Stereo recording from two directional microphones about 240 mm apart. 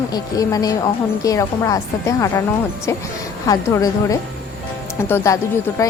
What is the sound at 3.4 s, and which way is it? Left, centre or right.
A woman's voice, centre.